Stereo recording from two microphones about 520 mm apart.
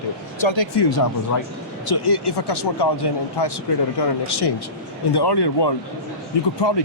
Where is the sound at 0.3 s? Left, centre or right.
Left.